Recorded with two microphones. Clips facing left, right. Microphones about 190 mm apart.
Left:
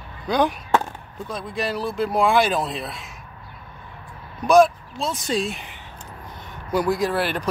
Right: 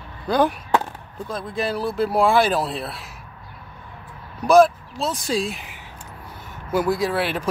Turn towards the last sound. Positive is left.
turn(degrees=0)  # may be behind; listen again after turning